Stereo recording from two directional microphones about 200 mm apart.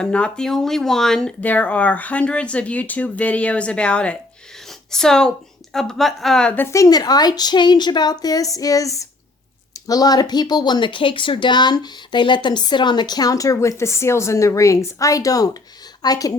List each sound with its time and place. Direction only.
0.0 s a woman's voice: 5° left (ahead or behind)